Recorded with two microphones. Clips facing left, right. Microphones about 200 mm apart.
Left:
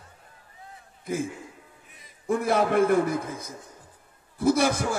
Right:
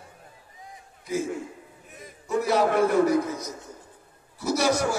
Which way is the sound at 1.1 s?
55° left (ahead or behind).